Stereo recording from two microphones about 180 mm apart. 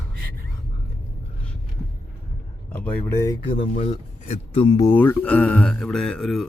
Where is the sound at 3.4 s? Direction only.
30° left (ahead or behind).